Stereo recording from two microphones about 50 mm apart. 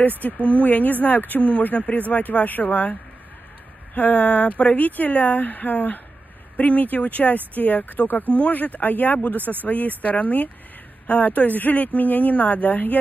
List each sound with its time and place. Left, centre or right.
0.0 s speech: left